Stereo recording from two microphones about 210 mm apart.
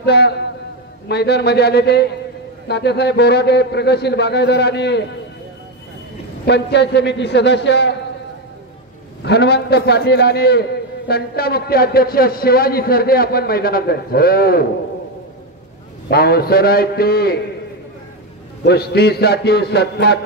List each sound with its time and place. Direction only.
0.0 s a man's voice: 50° left (ahead or behind)
6.4 s a man's voice: 55° left (ahead or behind)
9.2 s a man's voice: 50° left (ahead or behind)
16.1 s a man's voice: 50° left (ahead or behind)
18.6 s a man's voice: 50° left (ahead or behind)